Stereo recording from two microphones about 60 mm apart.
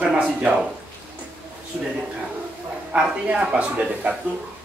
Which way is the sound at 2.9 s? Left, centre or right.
Right.